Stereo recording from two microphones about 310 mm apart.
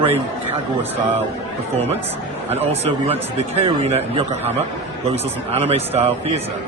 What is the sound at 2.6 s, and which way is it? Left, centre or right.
Speech, centre.